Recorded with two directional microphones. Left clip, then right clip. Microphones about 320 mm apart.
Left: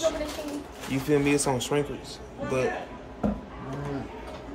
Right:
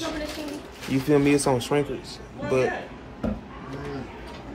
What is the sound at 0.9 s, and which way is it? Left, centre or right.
Speech, centre.